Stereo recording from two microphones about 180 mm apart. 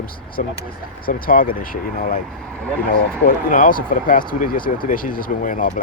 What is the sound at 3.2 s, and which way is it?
Speech, 45° left (ahead or behind).